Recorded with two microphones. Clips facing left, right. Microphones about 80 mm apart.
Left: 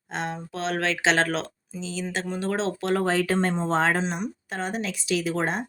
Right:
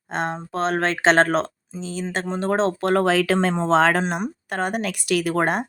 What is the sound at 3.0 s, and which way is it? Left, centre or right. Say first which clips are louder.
Speech: right 4 dB; right.